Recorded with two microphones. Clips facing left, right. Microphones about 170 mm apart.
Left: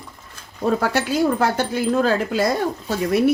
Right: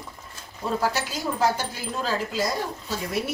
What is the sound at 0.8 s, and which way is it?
Speech, 60° left (ahead or behind).